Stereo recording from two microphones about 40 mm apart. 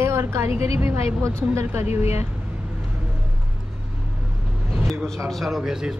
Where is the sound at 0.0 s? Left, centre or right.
Right.